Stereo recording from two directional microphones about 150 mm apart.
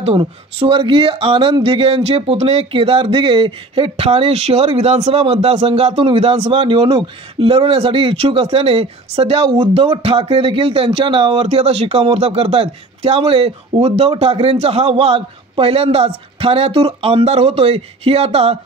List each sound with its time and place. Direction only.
0.0 s speech: 40° right (ahead or behind)